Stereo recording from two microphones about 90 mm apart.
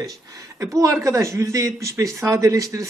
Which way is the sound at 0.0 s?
40° right (ahead or behind).